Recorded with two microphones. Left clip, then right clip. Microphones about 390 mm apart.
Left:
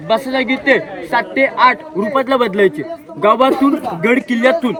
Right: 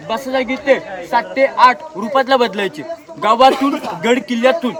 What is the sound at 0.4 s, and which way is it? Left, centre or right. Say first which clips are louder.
Speech: even; centre.